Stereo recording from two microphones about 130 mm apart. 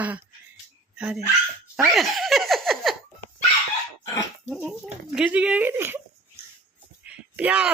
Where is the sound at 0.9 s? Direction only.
5° right (ahead or behind).